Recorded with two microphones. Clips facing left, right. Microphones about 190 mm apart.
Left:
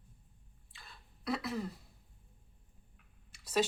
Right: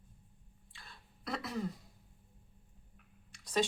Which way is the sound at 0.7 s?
Centre (ahead or behind).